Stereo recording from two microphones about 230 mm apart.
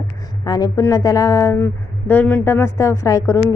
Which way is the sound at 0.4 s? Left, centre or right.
Centre.